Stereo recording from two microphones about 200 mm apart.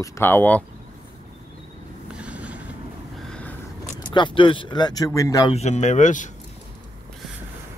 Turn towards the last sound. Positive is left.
turn(degrees=40)  # may be behind; listen again after turning